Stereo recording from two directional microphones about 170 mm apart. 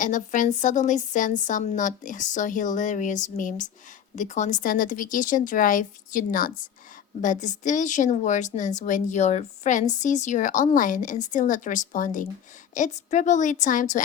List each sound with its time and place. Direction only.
0.0 s a woman's voice: 50° left (ahead or behind)